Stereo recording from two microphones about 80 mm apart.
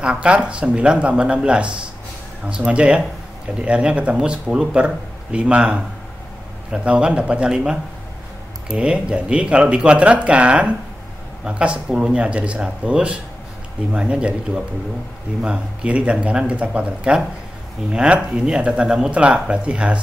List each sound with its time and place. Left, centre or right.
0.0 s speech: centre